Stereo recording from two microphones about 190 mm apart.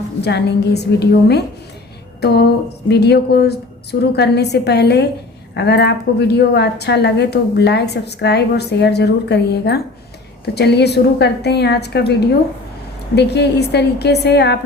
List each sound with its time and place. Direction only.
0.2 s a woman's voice: 60° left (ahead or behind)